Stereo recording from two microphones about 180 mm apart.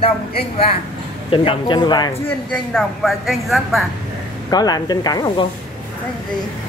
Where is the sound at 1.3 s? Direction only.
30° left (ahead or behind).